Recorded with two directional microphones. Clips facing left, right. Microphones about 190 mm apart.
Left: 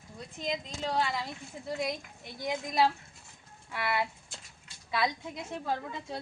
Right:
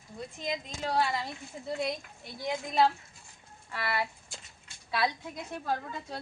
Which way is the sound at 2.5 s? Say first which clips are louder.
Right 1 dB; 5° left (ahead or behind).